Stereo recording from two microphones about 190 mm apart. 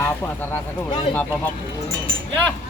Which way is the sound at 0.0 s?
10° left (ahead or behind).